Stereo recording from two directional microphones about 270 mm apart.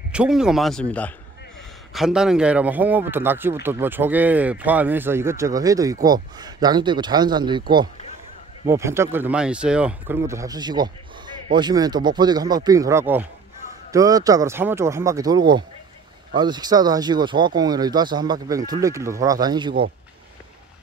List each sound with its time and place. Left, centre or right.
0.1 s speech: centre
8.6 s speech: centre